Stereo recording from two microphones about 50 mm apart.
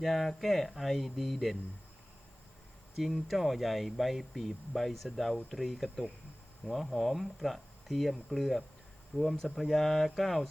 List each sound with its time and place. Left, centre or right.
0.0 s speech: centre
2.9 s speech: centre